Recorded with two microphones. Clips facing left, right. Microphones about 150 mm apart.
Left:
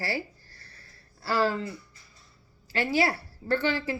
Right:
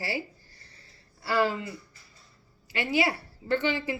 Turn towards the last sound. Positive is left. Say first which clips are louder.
# even
turn(degrees=-15)  # may be behind; listen again after turning